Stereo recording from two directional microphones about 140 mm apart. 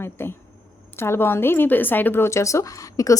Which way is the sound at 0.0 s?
15° left (ahead or behind).